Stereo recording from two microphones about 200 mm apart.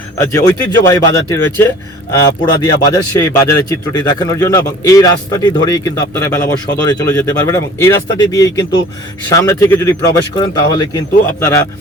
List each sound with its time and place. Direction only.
0.2 s a man's voice: 15° left (ahead or behind)